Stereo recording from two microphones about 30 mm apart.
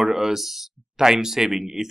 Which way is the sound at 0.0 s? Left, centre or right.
Centre.